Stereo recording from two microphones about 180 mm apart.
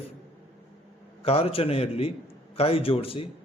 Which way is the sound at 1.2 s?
35° left (ahead or behind).